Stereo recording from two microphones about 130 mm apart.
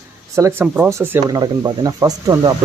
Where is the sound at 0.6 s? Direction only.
10° right (ahead or behind).